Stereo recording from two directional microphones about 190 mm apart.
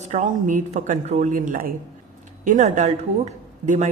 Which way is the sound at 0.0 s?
40° right (ahead or behind).